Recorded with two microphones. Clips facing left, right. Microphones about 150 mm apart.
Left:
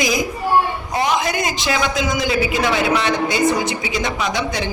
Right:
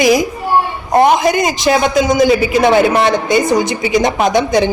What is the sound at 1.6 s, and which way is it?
A man's voice, 50° right (ahead or behind).